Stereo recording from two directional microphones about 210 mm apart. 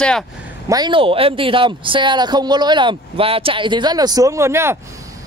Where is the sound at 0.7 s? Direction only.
20° right (ahead or behind).